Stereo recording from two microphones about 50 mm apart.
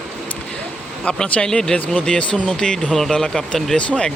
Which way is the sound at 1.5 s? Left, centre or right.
Centre.